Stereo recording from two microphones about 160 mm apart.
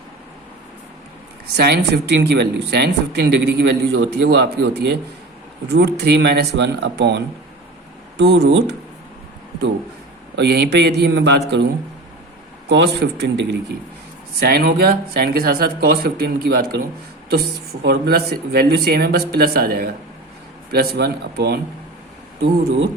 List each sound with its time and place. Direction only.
1.5 s speech: 90° right
8.2 s speech: 90° right
10.3 s speech: 90° right
14.3 s speech: 75° right (ahead or behind)